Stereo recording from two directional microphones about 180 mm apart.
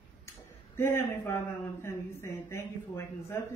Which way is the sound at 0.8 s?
15° left (ahead or behind).